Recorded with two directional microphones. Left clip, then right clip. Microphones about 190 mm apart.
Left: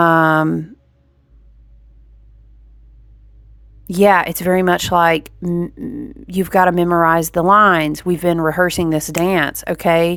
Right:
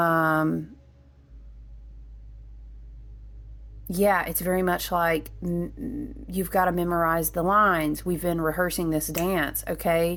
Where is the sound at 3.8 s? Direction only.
40° left (ahead or behind).